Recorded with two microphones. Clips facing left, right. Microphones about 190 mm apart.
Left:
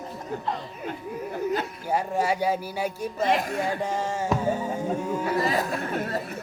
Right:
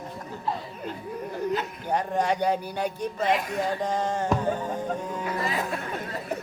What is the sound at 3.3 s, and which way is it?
Speech, 45° left (ahead or behind).